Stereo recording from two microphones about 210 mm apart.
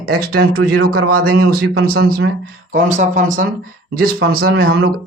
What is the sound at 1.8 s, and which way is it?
Speech, 45° right (ahead or behind).